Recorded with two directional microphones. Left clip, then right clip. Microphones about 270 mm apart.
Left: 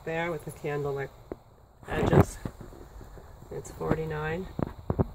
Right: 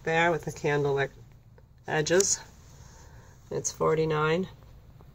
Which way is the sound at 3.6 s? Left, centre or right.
Centre.